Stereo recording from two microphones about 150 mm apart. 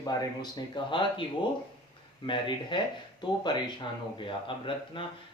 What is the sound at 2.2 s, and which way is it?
Speech, 30° left (ahead or behind).